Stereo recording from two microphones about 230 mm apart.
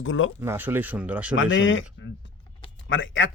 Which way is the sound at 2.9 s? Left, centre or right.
Left.